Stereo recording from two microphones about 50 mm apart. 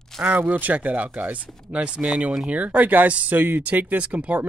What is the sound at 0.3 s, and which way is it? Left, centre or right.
Speech, right.